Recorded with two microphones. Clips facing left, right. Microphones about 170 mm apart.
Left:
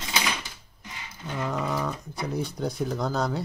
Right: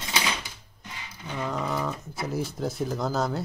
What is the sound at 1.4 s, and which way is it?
Speech, centre (ahead or behind).